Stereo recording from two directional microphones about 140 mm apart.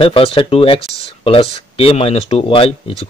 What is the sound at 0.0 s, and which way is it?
Speech, 40° left (ahead or behind).